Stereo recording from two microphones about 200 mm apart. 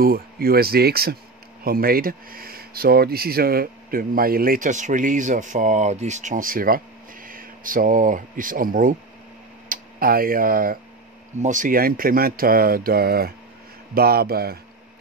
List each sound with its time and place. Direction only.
0.0 s speech: 50° right (ahead or behind)